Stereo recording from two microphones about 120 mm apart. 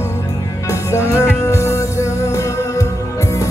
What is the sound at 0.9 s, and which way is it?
Music, 25° left (ahead or behind).